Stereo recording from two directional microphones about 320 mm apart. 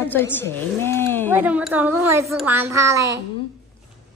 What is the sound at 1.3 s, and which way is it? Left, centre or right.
A woman's voice, centre.